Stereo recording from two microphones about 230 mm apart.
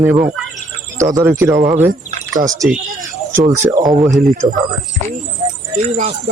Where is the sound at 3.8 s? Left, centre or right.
Centre.